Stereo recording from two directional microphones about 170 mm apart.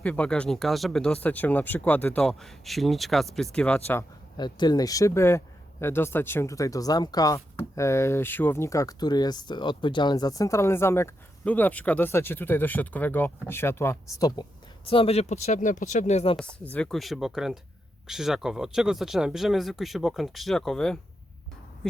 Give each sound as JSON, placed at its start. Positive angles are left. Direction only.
{"t": 0.0, "sound": "speech", "side_deg": 5}
{"t": 4.4, "sound": "speech", "side_deg": 25}
{"t": 14.8, "sound": "speech", "side_deg": 35}
{"t": 16.7, "sound": "speech", "side_deg": 5}